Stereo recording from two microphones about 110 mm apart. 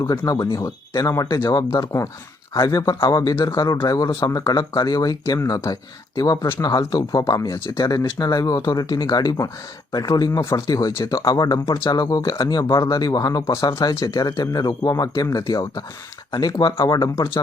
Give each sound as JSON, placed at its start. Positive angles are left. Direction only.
{"t": 0.0, "sound": "speech", "side_deg": 35}